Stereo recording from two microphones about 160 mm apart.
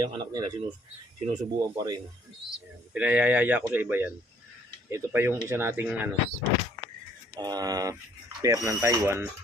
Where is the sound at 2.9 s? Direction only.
10° right (ahead or behind).